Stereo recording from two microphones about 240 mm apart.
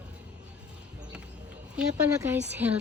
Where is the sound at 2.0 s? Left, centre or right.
Centre.